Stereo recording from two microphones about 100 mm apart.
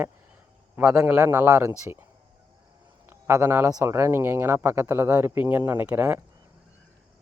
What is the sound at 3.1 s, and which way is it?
A man's voice, 25° right (ahead or behind).